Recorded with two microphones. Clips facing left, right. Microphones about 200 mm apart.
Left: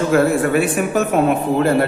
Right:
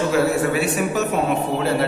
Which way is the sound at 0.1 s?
50° left (ahead or behind).